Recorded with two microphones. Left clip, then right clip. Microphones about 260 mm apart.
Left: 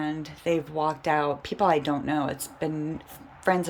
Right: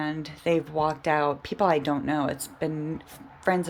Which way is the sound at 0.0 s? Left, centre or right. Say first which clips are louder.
Right 1 dB; centre.